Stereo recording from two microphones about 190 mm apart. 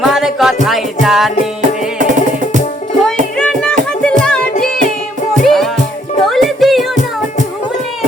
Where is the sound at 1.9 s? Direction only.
40° right (ahead or behind).